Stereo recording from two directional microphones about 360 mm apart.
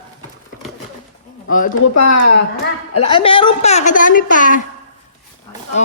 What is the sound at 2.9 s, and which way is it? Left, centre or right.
A woman's voice, centre.